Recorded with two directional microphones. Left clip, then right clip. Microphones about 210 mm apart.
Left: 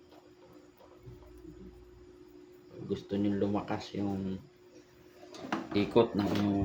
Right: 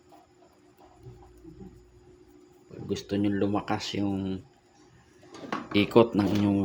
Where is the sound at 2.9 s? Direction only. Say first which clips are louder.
Right 4 dB; 50° right (ahead or behind).